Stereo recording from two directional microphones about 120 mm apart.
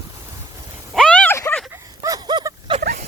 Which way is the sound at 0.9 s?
10° left (ahead or behind).